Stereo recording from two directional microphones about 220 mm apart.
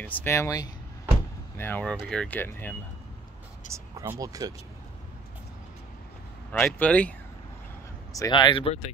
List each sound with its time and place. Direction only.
0.0 s speech: 10° left (ahead or behind)
3.7 s speech: 10° right (ahead or behind)
6.5 s speech: 5° left (ahead or behind)
8.1 s speech: 20° left (ahead or behind)